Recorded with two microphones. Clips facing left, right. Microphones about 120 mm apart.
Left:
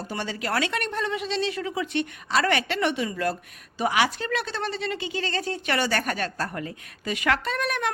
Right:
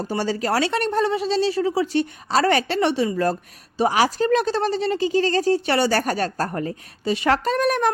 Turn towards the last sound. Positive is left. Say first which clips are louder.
# right 8 dB
turn(degrees=-35)  # may be behind; listen again after turning